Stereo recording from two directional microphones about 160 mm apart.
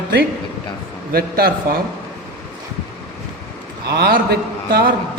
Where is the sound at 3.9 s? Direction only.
80° right.